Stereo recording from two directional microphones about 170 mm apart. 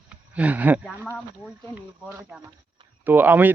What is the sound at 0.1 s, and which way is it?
Speech, 10° right (ahead or behind).